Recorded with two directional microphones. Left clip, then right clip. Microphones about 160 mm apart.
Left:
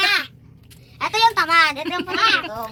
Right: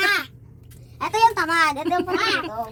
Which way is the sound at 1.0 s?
40° right (ahead or behind).